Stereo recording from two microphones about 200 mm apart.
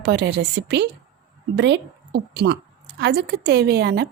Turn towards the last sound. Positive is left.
turn(degrees=-55)  # may be behind; listen again after turning